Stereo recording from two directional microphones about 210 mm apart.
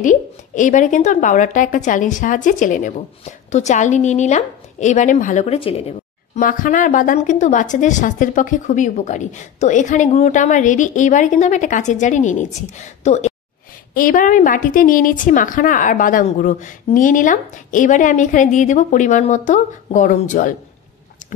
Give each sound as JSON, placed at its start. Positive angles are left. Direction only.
{"t": 0.0, "sound": "speech", "side_deg": 35}